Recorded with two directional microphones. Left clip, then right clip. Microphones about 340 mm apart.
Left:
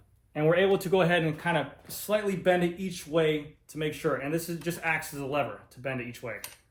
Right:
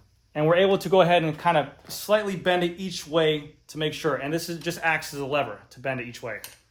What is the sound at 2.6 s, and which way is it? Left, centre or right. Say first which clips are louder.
Speech: right 3 dB; centre.